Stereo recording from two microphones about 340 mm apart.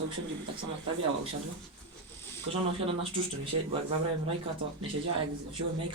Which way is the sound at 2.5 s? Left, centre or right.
Centre.